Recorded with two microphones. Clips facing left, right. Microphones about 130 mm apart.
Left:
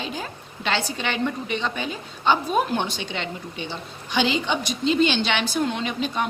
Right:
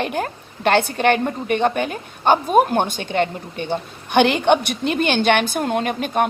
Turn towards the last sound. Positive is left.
turn(degrees=-55)  # may be behind; listen again after turning